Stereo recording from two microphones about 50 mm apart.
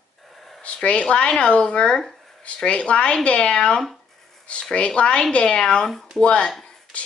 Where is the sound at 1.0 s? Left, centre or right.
Centre.